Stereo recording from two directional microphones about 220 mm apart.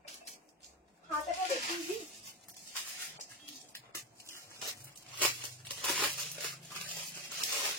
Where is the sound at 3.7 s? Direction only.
10° left (ahead or behind).